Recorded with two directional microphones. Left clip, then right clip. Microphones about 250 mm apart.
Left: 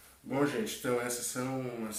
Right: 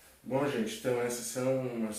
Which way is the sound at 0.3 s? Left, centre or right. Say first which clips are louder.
Even; left.